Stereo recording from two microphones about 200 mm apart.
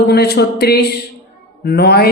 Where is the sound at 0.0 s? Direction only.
55° left (ahead or behind).